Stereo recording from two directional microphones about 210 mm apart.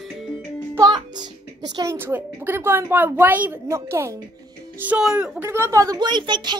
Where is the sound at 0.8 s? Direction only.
20° right (ahead or behind).